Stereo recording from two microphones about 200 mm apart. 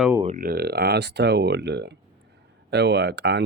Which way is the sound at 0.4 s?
50° right (ahead or behind).